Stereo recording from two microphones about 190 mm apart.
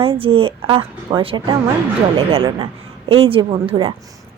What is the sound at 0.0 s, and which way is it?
Speech, 30° right (ahead or behind).